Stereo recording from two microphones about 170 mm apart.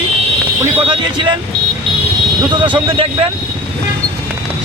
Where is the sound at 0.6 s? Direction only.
30° right (ahead or behind).